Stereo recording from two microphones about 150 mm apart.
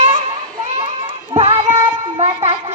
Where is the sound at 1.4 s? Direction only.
40° right (ahead or behind).